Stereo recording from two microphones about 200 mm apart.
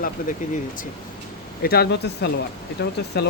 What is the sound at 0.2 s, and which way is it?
Speech, 45° left (ahead or behind).